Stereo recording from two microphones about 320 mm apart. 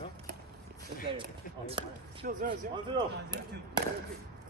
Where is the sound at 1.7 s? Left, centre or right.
Right.